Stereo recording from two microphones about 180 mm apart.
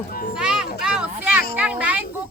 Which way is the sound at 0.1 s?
55° left (ahead or behind).